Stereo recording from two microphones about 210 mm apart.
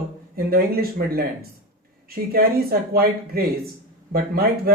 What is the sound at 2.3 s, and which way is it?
Speech, 45° right (ahead or behind).